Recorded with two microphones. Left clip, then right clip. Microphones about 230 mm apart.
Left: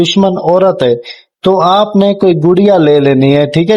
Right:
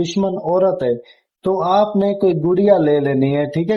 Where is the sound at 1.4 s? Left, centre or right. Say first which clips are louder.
Left 7 dB; left.